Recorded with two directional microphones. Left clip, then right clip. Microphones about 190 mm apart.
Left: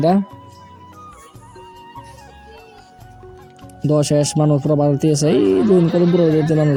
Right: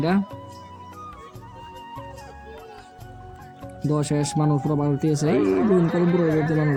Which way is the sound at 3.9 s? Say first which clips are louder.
Left 9 dB; 20° left (ahead or behind).